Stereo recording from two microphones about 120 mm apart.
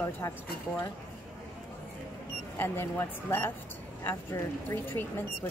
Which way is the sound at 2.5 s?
15° left (ahead or behind).